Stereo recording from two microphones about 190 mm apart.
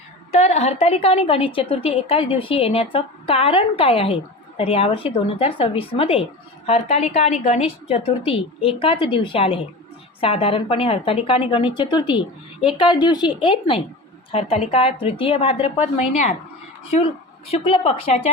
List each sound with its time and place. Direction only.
0.3 s a woman's voice: 35° left (ahead or behind)
17.5 s a woman's voice: 30° left (ahead or behind)